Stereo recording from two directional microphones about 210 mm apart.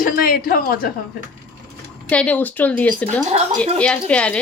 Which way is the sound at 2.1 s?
5° left (ahead or behind).